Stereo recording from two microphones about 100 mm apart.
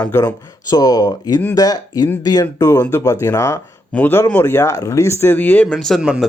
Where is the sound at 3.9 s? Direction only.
15° left (ahead or behind).